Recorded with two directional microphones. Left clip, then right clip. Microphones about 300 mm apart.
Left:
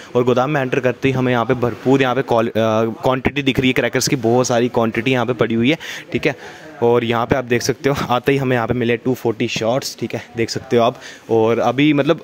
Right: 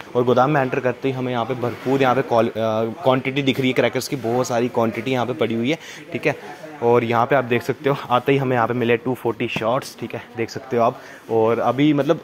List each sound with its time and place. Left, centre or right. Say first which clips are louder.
0.1 s speech: left 1 dB; left